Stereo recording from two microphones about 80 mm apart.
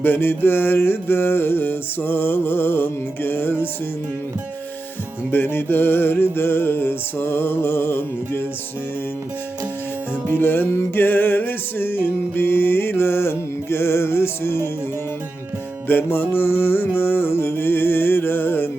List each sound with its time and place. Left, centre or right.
0.0 s music: left
5.3 s music: left
10.2 s music: left
15.9 s music: left